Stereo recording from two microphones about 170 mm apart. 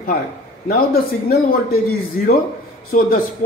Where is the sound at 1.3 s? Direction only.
60° left (ahead or behind).